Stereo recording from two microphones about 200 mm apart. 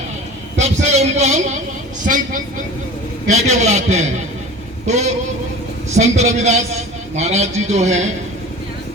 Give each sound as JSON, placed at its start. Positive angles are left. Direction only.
{"t": 0.6, "sound": "a man's voice", "side_deg": -35}
{"t": 5.9, "sound": "a man's voice", "side_deg": -35}